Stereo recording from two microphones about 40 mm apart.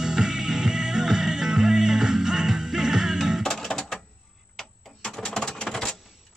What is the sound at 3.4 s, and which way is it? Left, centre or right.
Music, centre.